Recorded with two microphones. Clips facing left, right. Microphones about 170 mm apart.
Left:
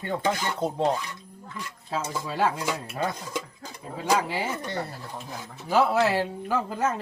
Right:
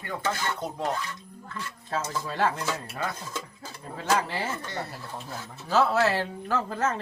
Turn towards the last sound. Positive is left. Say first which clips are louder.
# left 1 dB
turn(degrees=10)  # may be behind; listen again after turning